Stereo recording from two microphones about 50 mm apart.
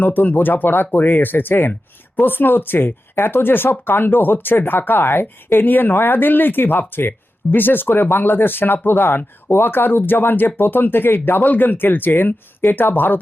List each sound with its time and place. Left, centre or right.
0.0 s speech: left